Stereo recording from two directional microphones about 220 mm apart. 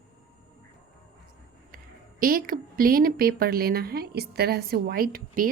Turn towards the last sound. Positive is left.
turn(degrees=-40)  # may be behind; listen again after turning